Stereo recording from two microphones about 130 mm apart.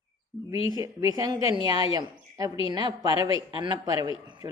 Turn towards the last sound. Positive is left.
turn(degrees=-35)  # may be behind; listen again after turning